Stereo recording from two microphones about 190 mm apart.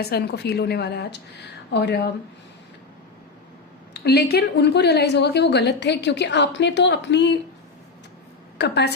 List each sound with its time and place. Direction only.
0.0 s a woman's voice: 55° left (ahead or behind)
3.9 s a woman's voice: 60° left (ahead or behind)
8.5 s a woman's voice: 60° left (ahead or behind)